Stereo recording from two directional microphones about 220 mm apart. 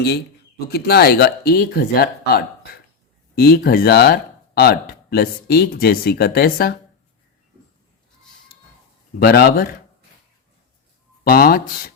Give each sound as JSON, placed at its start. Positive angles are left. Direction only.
{"t": 0.7, "sound": "speech", "side_deg": 45}
{"t": 9.1, "sound": "speech", "side_deg": 45}
{"t": 11.2, "sound": "speech", "side_deg": 45}